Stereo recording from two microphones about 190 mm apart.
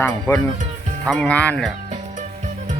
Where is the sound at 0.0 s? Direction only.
10° left (ahead or behind).